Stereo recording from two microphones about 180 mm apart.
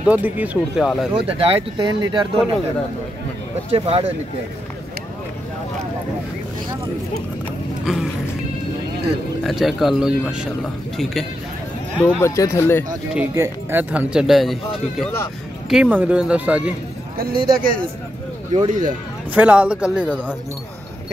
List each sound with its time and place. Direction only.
0.0 s speech: 10° right (ahead or behind)
1.1 s speech: 30° right (ahead or behind)
3.7 s speech: 35° right (ahead or behind)
7.8 s speech: 5° right (ahead or behind)
9.4 s speech: centre (ahead or behind)
12.0 s speech: 15° left (ahead or behind)
13.1 s speech: 10° right (ahead or behind)
15.7 s speech: 5° right (ahead or behind)
17.2 s speech: 55° right (ahead or behind)
18.5 s speech: 40° right (ahead or behind)
19.3 s speech: 10° right (ahead or behind)